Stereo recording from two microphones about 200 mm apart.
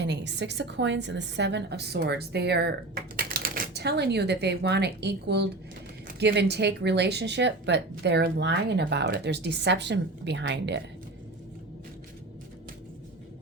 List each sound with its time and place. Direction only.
0.0 s a woman's voice: 60° right (ahead or behind)